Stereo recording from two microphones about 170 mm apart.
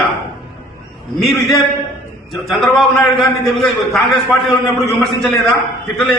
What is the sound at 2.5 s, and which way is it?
A man's voice, centre (ahead or behind).